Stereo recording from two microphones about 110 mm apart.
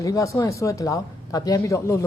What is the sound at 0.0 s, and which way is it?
A man's voice, 30° left (ahead or behind).